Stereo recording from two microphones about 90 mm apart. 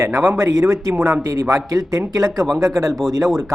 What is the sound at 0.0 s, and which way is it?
Speech, 30° right (ahead or behind).